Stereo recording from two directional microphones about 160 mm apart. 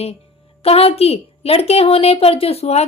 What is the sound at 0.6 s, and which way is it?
A woman's voice, 40° left (ahead or behind).